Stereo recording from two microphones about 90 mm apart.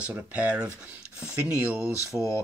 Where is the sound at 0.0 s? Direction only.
15° right (ahead or behind).